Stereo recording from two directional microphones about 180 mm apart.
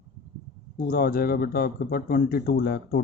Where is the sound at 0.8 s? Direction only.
55° left (ahead or behind).